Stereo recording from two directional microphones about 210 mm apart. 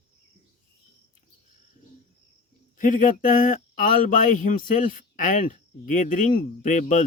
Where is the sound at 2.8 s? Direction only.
40° left (ahead or behind).